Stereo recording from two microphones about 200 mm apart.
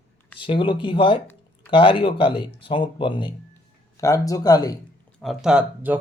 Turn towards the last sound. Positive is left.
turn(degrees=-5)  # may be behind; listen again after turning